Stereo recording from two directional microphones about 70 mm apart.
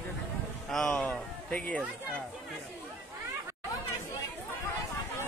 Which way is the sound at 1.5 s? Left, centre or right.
Left.